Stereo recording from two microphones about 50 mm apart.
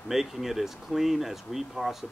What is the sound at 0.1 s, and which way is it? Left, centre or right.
Speech, centre.